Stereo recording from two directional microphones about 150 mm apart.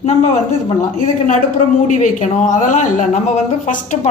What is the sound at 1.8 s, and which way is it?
A woman's voice, 55° left (ahead or behind).